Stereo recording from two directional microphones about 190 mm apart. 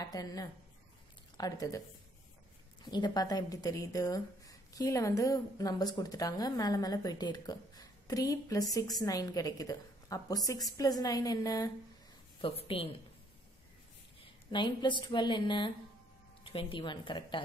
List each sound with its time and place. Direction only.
0.0 s a woman's voice: 20° left (ahead or behind)
2.8 s a woman's voice: 20° left (ahead or behind)
14.5 s a woman's voice: 25° left (ahead or behind)